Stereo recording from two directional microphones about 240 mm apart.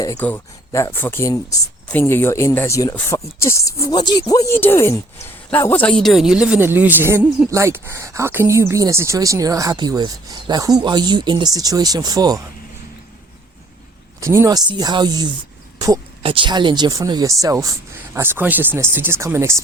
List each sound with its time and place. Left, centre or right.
0.0 s speech: centre
14.2 s speech: centre